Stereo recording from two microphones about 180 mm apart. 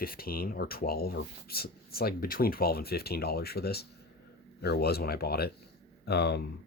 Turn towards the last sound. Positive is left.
turn(degrees=65)  # may be behind; listen again after turning